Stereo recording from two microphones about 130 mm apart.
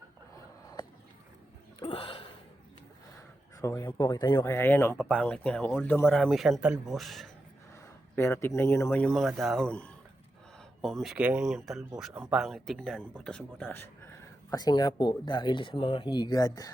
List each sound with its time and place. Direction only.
1.8 s a sound: 45° left (ahead or behind)
3.6 s speech: 20° left (ahead or behind)
4.4 s speech: 20° left (ahead or behind)
4.9 s speech: centre (ahead or behind)
8.1 s speech: 20° left (ahead or behind)
9.1 s speech: centre (ahead or behind); by 13.9 s 15° left (ahead or behind)
14.5 s speech: 30° left (ahead or behind)